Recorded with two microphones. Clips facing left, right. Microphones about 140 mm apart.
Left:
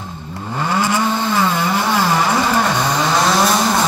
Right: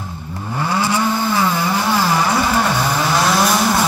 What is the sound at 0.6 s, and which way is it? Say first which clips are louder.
Vehicle: left 1 dB; 15° left (ahead or behind).